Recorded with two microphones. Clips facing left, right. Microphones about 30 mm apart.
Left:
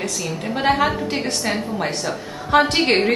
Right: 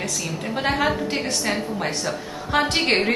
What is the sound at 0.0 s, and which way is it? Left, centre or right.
A woman's voice, centre.